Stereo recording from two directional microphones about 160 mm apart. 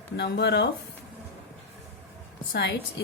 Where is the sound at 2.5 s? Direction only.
90° left.